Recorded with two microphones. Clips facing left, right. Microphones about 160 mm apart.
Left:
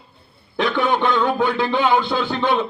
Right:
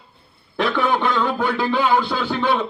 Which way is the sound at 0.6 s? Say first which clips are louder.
Even; 20° left (ahead or behind).